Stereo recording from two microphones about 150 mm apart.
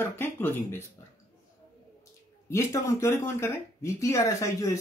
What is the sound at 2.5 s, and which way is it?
Speech, 20° left (ahead or behind).